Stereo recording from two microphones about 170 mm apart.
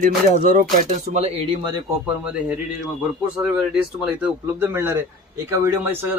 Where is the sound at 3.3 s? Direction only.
5° right (ahead or behind).